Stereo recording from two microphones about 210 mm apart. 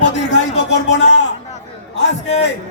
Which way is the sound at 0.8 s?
55° left (ahead or behind).